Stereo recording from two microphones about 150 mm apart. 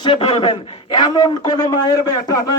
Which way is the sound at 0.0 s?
35° left (ahead or behind).